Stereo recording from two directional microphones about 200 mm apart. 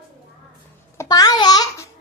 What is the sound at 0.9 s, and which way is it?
Babbling, 20° left (ahead or behind).